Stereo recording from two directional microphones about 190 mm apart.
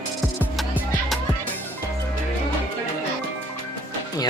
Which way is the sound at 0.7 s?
Centre (ahead or behind).